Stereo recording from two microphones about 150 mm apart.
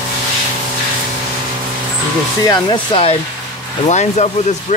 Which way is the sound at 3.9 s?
50° left (ahead or behind).